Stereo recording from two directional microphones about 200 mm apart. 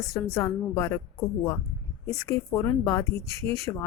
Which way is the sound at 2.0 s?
15° left (ahead or behind).